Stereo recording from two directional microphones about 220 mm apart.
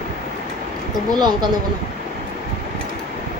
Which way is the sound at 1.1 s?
20° right (ahead or behind).